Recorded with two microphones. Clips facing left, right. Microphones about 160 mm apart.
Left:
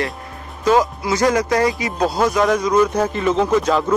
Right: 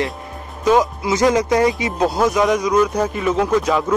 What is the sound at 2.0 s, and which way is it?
Speech, 5° right (ahead or behind).